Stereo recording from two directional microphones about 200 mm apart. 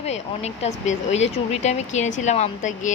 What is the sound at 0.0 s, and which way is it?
Speech, 30° left (ahead or behind).